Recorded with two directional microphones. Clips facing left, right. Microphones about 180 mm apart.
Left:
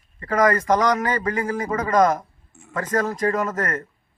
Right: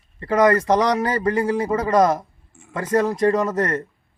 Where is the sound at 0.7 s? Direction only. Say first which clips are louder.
Right 1 dB; 30° right (ahead or behind).